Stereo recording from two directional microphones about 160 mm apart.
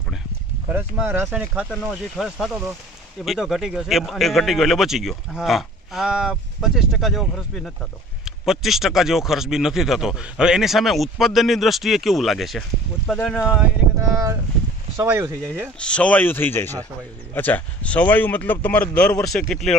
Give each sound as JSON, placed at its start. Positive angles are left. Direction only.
{"t": 0.7, "sound": "speech", "side_deg": -10}
{"t": 14.1, "sound": "speech", "side_deg": -20}
{"t": 15.8, "sound": "speech", "side_deg": 5}